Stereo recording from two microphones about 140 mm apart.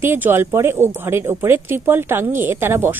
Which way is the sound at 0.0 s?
15° right (ahead or behind).